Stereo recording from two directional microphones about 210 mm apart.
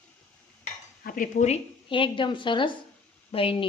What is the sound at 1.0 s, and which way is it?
A woman's voice, 40° left (ahead or behind).